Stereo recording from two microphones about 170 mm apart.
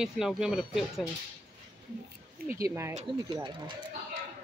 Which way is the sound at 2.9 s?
40° right (ahead or behind).